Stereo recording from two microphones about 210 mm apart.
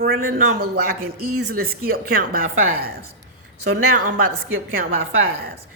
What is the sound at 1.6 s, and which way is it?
Speech, 45° right (ahead or behind).